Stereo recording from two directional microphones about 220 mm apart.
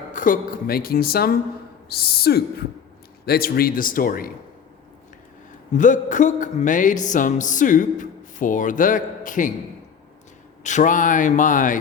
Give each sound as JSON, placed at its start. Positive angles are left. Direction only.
{"t": 0.1, "sound": "speech", "side_deg": 35}
{"t": 3.2, "sound": "music", "side_deg": 45}
{"t": 5.7, "sound": "music", "side_deg": 35}
{"t": 10.6, "sound": "music", "side_deg": 35}